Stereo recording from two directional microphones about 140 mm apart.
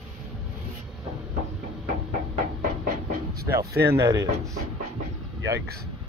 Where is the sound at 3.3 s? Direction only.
90° right.